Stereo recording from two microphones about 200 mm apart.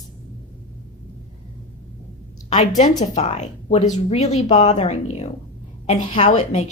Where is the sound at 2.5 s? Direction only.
35° left (ahead or behind).